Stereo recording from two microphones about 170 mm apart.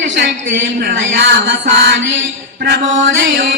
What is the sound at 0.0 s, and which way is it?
Music, 90° right.